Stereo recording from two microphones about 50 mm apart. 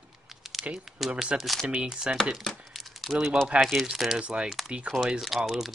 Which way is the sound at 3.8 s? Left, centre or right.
Centre.